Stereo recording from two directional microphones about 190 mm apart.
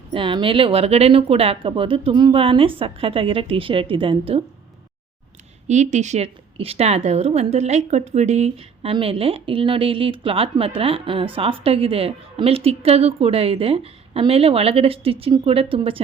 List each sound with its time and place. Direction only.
0.1 s a woman's voice: 25° right (ahead or behind)
5.6 s a woman's voice: 40° right (ahead or behind)